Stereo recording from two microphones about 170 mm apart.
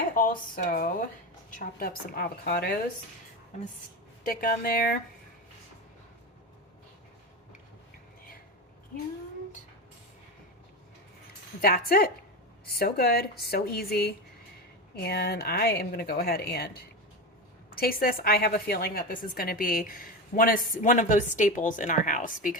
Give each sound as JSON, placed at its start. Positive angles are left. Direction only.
{"t": 0.1, "sound": "a woman's voice", "side_deg": 55}
{"t": 4.2, "sound": "a woman's voice", "side_deg": 55}
{"t": 11.6, "sound": "a woman's voice", "side_deg": 60}
{"t": 17.7, "sound": "a woman's voice", "side_deg": 60}